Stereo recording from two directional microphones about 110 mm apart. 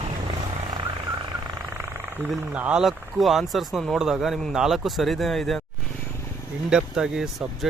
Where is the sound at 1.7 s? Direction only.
25° right (ahead or behind).